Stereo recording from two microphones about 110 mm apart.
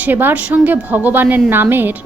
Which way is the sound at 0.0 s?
15° right (ahead or behind).